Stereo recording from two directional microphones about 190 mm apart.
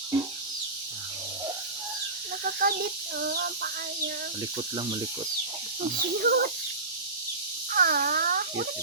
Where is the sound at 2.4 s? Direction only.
50° right (ahead or behind).